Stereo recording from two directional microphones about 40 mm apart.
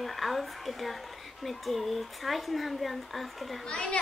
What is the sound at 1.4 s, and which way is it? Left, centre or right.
Speech, centre.